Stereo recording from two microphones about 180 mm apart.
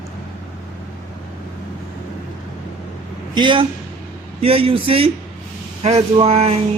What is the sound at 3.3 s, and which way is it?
Speech, 25° right (ahead or behind).